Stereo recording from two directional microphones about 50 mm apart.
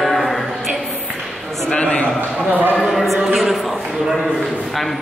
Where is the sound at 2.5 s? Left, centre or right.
Right.